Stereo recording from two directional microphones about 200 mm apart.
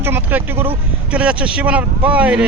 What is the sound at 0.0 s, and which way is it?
Speech, 10° right (ahead or behind).